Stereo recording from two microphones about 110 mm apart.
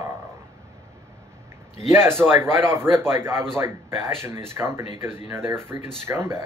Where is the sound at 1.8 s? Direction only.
25° right (ahead or behind).